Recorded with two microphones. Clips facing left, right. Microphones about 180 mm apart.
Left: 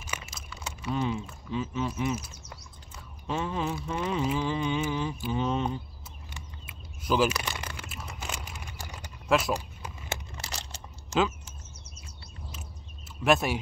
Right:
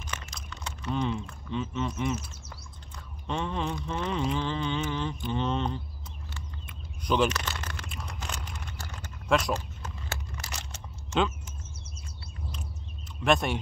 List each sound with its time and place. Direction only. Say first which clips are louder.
0.0 s a sound: even; 10° left (ahead or behind)
10.3 s crunch: even; 35° left (ahead or behind)
13.2 s speech: left 1 dB; 5° left (ahead or behind)